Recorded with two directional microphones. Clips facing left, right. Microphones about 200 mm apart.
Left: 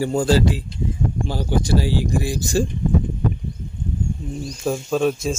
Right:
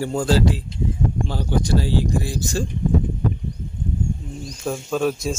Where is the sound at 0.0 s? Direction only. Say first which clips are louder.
Left 2 dB; centre (ahead or behind).